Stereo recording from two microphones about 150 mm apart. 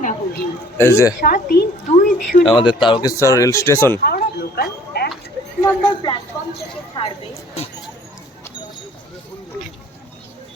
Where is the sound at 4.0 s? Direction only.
90° left.